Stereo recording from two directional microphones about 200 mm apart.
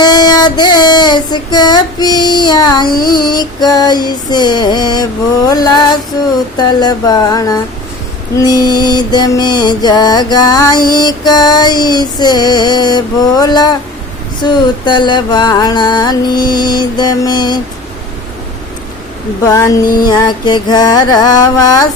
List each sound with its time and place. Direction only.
0.0 s female singing: 20° left (ahead or behind)
3.2 s music: 20° left (ahead or behind)
19.5 s a sound: 15° left (ahead or behind)
20.0 s music: 20° left (ahead or behind)